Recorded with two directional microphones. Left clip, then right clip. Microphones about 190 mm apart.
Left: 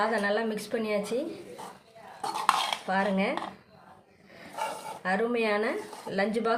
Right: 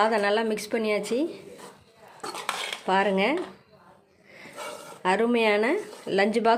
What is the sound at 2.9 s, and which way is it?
Speech, 45° right (ahead or behind).